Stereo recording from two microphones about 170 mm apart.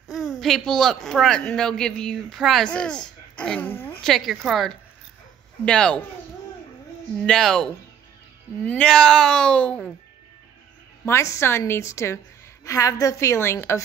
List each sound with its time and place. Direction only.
0.1 s a sound: centre (ahead or behind)
1.0 s a woman's voice: 5° left (ahead or behind)
7.2 s a woman's voice: 5° left (ahead or behind)
11.1 s a woman's voice: 15° left (ahead or behind)